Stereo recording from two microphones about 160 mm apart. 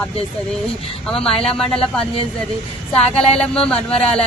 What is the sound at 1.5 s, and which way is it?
Speech, 5° left (ahead or behind).